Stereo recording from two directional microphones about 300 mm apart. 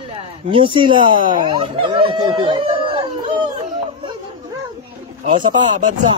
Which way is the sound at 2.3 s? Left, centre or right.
Centre.